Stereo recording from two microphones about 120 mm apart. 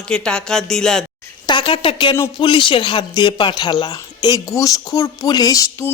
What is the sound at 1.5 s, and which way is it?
Speech, 45° left (ahead or behind).